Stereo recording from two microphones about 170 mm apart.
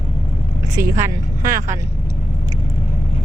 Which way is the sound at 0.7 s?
20° right (ahead or behind).